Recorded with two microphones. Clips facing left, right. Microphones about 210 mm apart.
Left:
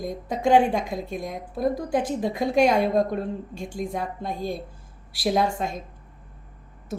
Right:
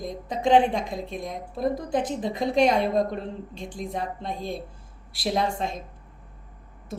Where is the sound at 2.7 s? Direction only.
5° left (ahead or behind).